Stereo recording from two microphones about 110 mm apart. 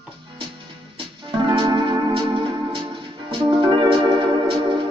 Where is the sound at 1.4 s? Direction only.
45° right (ahead or behind).